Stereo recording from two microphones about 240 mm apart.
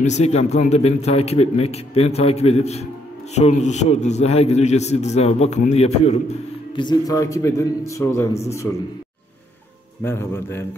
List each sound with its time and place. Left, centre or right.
0.0 s a man's voice: left; by 8.7 s centre
10.0 s speech: centre